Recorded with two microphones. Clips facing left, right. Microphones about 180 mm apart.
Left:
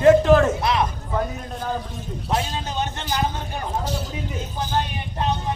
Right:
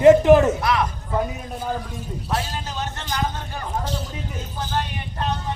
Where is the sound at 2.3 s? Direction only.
20° left (ahead or behind).